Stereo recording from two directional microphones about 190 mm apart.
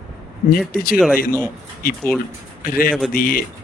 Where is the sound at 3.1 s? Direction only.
50° left (ahead or behind).